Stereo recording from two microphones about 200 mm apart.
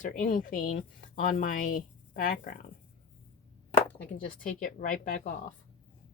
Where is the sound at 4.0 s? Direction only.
45° left (ahead or behind).